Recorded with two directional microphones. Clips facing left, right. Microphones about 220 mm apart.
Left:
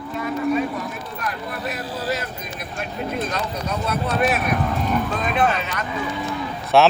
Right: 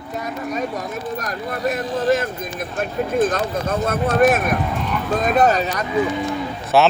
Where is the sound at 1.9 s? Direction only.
50° right (ahead or behind).